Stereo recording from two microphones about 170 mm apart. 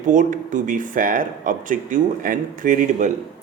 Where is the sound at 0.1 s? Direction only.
50° right (ahead or behind).